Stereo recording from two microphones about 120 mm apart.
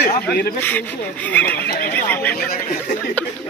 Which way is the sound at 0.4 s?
15° left (ahead or behind).